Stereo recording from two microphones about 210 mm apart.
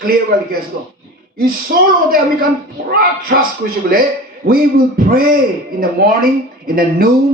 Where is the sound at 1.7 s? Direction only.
50° right (ahead or behind).